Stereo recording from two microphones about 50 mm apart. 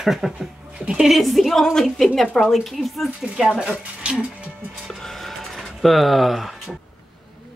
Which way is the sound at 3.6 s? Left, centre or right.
Right.